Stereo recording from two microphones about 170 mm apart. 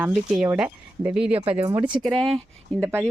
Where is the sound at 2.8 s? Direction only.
15° right (ahead or behind).